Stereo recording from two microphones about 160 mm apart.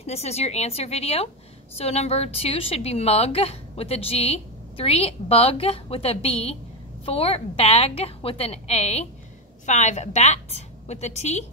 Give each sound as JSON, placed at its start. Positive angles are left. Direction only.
{"t": 0.0, "sound": "a woman's voice", "side_deg": 40}